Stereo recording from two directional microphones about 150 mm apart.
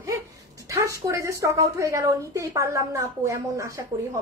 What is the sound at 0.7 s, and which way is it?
A woman's voice, 20° right (ahead or behind).